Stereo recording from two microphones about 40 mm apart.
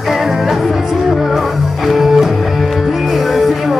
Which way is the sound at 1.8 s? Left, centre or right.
Centre.